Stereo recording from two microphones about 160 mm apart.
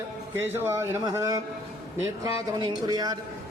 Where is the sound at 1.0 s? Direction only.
20° right (ahead or behind).